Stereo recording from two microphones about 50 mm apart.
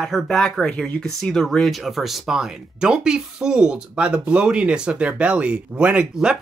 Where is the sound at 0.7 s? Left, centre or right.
Left.